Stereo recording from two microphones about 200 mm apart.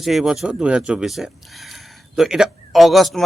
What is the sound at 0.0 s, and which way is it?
Speech, centre (ahead or behind).